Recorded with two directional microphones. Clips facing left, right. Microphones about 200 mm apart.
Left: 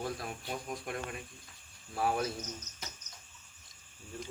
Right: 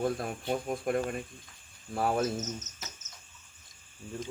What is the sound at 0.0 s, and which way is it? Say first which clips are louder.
Speech: right 7 dB; 50° right (ahead or behind).